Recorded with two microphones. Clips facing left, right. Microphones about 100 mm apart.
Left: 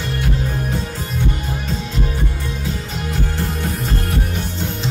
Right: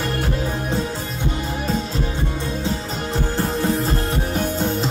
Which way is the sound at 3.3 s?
35° right (ahead or behind).